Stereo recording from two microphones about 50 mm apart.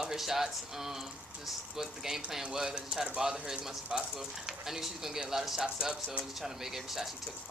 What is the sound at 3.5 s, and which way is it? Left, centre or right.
Speech, centre.